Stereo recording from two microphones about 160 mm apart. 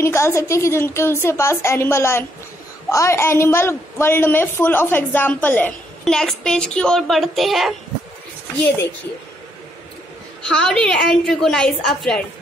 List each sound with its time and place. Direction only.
0.0 s a woman's voice: 15° left (ahead or behind); by 7.7 s centre (ahead or behind)
10.4 s a woman's voice: 5° left (ahead or behind)